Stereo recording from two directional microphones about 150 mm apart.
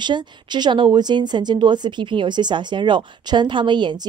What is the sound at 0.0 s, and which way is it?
Speech, 30° right (ahead or behind).